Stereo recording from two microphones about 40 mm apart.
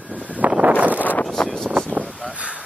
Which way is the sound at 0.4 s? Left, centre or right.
Right.